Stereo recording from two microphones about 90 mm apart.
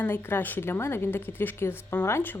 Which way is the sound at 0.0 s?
25° left (ahead or behind).